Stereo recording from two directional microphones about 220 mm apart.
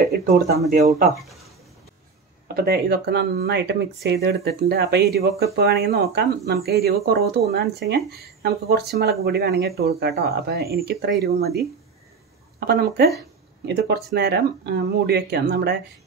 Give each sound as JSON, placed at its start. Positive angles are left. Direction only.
{"t": 0.0, "sound": "speech", "side_deg": -45}
{"t": 1.2, "sound": "a sound", "side_deg": 0}
{"t": 2.4, "sound": "speech", "side_deg": -45}